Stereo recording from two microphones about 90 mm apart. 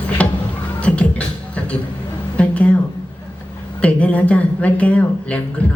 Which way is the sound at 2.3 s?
15° left (ahead or behind).